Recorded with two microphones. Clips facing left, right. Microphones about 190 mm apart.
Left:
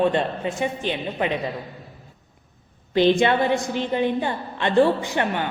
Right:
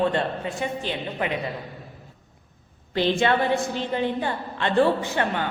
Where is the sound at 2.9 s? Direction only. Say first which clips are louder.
Left 4 dB; 20° left (ahead or behind).